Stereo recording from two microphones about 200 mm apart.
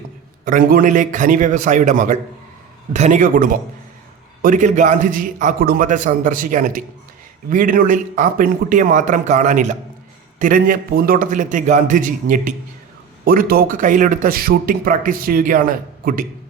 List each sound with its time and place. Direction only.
0.4 s a man's voice: 45° right (ahead or behind)